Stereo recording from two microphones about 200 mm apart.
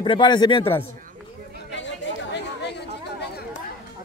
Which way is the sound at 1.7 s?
65° left (ahead or behind).